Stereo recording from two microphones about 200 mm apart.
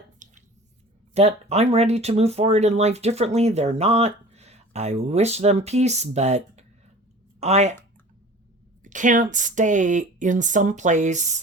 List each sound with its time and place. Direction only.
0.2 s squish: 40° right (ahead or behind)
1.1 s speech: 30° right (ahead or behind)
8.8 s speech: 40° right (ahead or behind)